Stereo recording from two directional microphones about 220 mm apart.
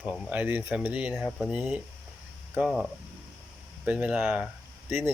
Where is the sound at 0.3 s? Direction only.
10° right (ahead or behind).